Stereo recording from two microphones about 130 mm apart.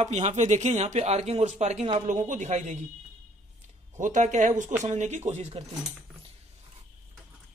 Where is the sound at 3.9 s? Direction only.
75° right (ahead or behind); by 5.6 s 60° right (ahead or behind).